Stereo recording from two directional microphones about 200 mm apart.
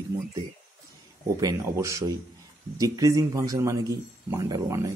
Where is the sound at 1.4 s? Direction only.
15° right (ahead or behind).